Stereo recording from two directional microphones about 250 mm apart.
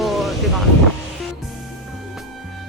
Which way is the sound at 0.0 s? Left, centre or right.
Centre.